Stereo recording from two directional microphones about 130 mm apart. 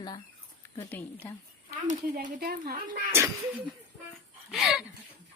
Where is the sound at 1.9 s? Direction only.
90° right.